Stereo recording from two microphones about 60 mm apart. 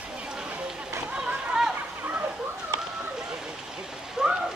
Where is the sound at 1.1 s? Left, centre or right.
Centre.